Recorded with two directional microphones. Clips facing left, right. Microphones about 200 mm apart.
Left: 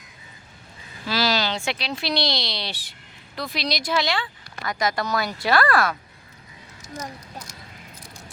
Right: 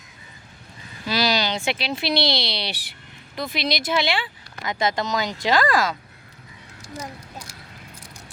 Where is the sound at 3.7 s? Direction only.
Centre (ahead or behind).